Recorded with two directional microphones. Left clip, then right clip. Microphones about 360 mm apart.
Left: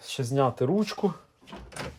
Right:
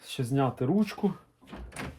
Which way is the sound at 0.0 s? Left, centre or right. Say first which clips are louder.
Left 4 dB; centre.